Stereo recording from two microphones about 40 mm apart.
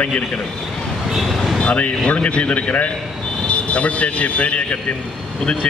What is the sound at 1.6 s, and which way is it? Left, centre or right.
A man's voice, left.